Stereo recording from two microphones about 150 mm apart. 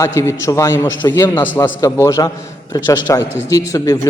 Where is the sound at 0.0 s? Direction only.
20° left (ahead or behind).